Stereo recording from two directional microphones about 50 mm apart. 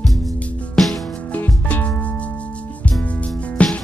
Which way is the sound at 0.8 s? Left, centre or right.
Centre.